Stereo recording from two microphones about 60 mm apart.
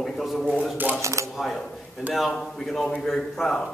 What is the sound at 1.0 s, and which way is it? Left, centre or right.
Speech, right.